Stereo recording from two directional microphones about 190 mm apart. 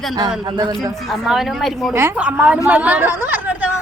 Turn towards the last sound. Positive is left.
turn(degrees=-10)  # may be behind; listen again after turning